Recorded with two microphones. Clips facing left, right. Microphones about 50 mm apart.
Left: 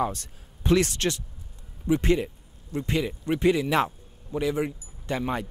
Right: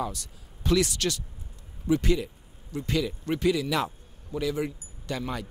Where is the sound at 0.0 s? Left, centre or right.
Left.